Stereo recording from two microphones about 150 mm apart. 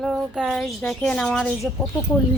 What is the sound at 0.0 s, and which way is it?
Speech, centre (ahead or behind).